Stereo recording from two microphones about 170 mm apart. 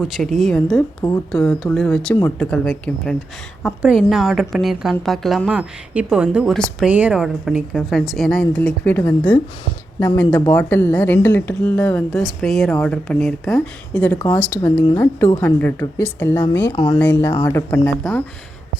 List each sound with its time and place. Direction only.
0.0 s a woman's voice: centre (ahead or behind)
10.5 s a woman's voice: 10° left (ahead or behind)
16.7 s speech: 30° left (ahead or behind)
17.0 s speech: 15° left (ahead or behind)